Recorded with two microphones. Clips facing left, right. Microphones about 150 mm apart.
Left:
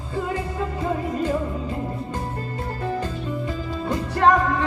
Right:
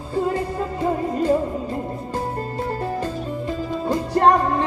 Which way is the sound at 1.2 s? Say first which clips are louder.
Right 4 dB; 35° right (ahead or behind).